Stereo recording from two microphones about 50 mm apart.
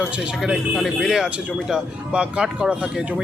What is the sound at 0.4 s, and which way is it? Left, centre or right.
Speech, centre.